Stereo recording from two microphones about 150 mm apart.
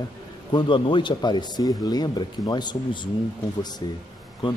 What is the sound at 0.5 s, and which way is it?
Speech, 30° left (ahead or behind).